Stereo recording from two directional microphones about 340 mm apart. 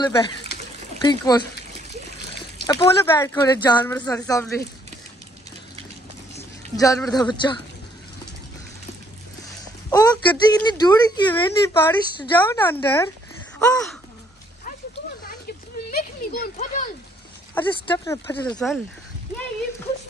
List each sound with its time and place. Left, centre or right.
0.0 s speech: centre
2.6 s speech: centre
6.3 s speech: centre
9.8 s speech: centre
13.7 s a sound: centre
15.9 s a sound: left
17.6 s speech: centre